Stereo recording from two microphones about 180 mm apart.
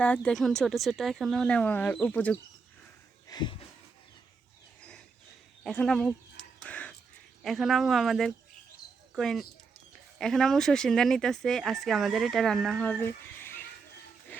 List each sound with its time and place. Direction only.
0.0 s speech: 5° left (ahead or behind)
3.2 s wheeze: 25° left (ahead or behind)
5.6 s bird: 5° left (ahead or behind)
7.4 s speech: centre (ahead or behind)